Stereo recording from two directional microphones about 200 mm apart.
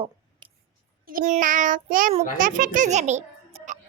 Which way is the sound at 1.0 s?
40° right (ahead or behind).